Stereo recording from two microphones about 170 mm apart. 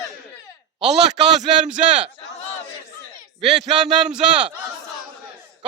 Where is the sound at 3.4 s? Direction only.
40° right (ahead or behind).